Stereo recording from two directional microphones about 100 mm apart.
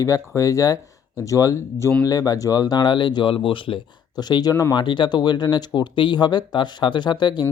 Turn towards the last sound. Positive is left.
turn(degrees=50)  # may be behind; listen again after turning